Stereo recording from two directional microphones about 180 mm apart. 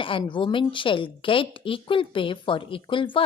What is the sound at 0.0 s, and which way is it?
A woman's voice, 30° left (ahead or behind).